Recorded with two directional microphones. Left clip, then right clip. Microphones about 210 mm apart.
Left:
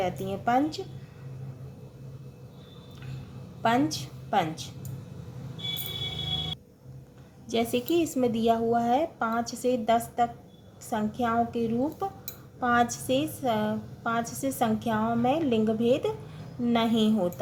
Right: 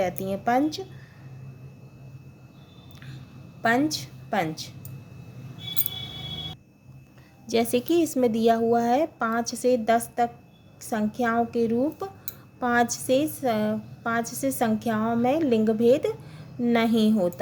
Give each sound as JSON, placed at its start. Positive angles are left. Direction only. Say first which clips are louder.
{"t": 0.0, "sound": "a woman's voice", "louder": "right 3 dB", "side_deg": -40}
{"t": 3.6, "sound": "a woman's voice", "louder": "right 2 dB", "side_deg": -35}
{"t": 7.4, "sound": "a woman's voice", "louder": "right 4 dB", "side_deg": -40}